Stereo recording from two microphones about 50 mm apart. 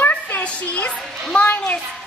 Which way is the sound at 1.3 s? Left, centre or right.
Left.